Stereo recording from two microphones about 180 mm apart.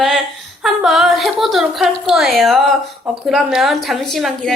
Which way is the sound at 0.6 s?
Centre (ahead or behind).